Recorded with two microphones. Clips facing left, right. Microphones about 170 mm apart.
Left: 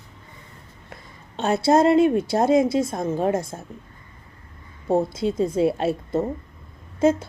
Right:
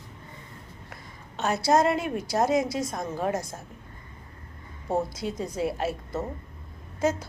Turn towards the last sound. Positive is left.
turn(degrees=25)  # may be behind; listen again after turning